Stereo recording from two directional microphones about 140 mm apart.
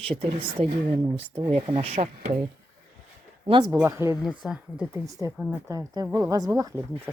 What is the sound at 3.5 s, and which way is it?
Speech, 35° right (ahead or behind).